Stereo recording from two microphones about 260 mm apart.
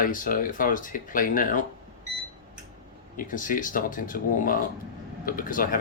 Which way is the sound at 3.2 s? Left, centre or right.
Left.